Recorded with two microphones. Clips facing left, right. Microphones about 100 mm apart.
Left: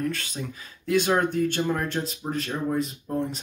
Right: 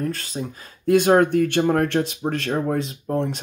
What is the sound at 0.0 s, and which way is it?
Speech, 35° right (ahead or behind).